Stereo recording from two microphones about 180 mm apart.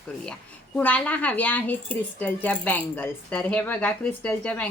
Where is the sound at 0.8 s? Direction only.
10° left (ahead or behind).